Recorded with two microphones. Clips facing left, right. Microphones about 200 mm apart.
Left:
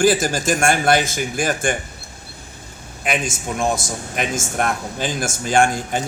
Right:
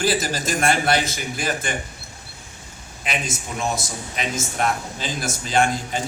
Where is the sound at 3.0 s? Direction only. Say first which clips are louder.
Left 5 dB; 50° left (ahead or behind).